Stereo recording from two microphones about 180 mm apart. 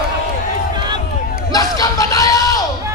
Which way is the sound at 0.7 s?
25° right (ahead or behind).